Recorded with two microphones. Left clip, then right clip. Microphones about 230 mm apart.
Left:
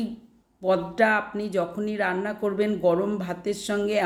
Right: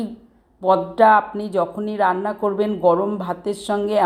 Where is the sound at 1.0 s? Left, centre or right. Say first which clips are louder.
Right 10 dB; centre.